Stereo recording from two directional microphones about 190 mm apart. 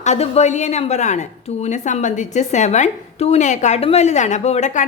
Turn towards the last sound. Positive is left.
turn(degrees=40)  # may be behind; listen again after turning